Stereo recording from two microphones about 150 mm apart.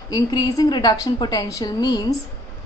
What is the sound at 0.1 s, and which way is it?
A woman's voice, 25° left (ahead or behind).